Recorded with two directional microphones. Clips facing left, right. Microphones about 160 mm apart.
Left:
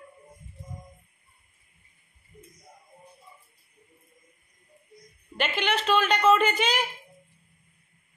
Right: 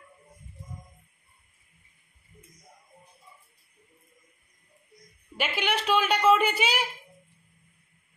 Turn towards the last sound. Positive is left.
turn(degrees=-10)  # may be behind; listen again after turning